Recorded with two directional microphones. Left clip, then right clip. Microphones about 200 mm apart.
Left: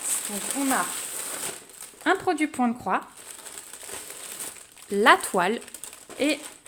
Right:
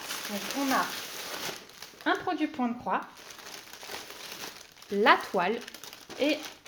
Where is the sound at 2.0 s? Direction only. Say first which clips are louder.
Left 5 dB; 60° left (ahead or behind).